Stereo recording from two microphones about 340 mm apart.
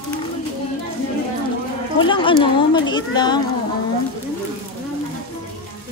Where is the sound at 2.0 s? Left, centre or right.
Centre.